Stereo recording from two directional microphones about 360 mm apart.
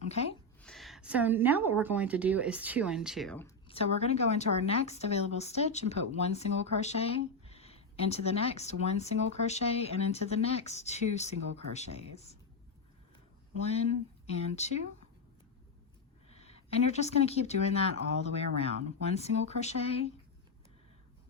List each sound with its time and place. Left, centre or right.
0.1 s a woman's voice: centre
0.6 s a woman's voice: centre
14.3 s a woman's voice: centre
16.4 s a woman's voice: centre